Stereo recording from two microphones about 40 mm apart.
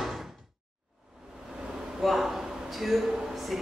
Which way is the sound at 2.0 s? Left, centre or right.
Centre.